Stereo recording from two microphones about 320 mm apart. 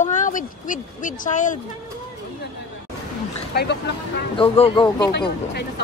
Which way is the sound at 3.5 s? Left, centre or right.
Left.